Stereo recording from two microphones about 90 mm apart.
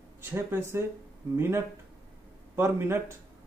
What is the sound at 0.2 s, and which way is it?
A man's voice, 25° right (ahead or behind).